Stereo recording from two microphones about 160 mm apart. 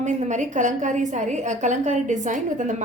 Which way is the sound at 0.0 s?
50° right (ahead or behind).